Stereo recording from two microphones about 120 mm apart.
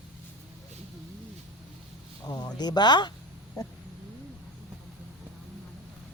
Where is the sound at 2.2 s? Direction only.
35° left (ahead or behind).